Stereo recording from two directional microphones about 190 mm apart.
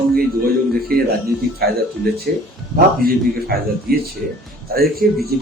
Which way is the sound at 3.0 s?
50° right (ahead or behind).